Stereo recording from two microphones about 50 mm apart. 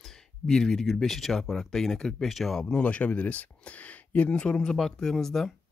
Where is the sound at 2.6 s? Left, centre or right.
Centre.